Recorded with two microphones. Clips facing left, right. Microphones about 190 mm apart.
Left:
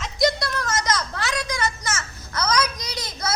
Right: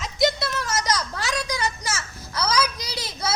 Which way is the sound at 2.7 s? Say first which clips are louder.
Even; 30° right (ahead or behind).